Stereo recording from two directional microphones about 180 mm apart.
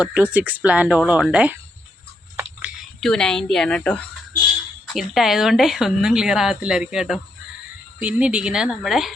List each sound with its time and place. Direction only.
0.0 s speech: 5° right (ahead or behind)
2.3 s a sound: 10° right (ahead or behind)
3.0 s speech: 5° left (ahead or behind)